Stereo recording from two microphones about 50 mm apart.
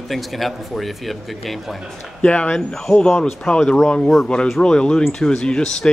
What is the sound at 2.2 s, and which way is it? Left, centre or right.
Speech, left.